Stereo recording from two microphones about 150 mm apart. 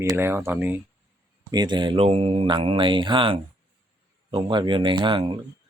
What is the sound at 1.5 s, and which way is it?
Speech, 30° right (ahead or behind).